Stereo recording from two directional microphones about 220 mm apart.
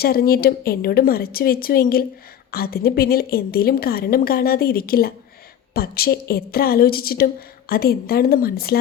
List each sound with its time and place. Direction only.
0.0 s a woman's voice: 45° left (ahead or behind)